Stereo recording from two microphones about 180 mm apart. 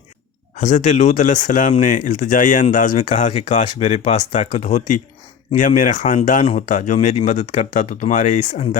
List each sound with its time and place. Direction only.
0.5 s speech: 40° left (ahead or behind)